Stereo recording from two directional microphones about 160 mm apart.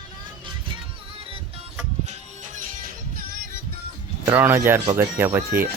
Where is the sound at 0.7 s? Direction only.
35° right (ahead or behind).